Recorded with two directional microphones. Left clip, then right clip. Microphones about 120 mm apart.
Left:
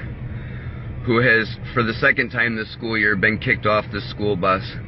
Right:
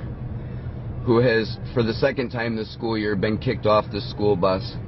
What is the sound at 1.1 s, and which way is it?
A man's voice, 25° left (ahead or behind).